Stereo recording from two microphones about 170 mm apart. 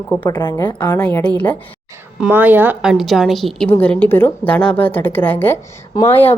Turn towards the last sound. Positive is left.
turn(degrees=10)  # may be behind; listen again after turning